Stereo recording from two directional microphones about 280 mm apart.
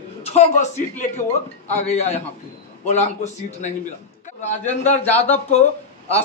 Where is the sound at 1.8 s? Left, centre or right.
Left.